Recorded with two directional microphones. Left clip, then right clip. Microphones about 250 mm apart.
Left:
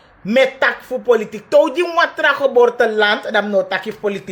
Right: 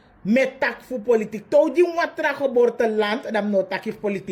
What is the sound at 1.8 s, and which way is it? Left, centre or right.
Speech, left.